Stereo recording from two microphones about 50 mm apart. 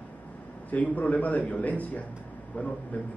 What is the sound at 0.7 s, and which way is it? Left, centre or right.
A man's voice, left.